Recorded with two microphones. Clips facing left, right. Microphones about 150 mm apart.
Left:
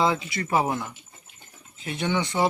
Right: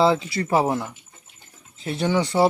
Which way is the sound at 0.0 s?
35° right (ahead or behind).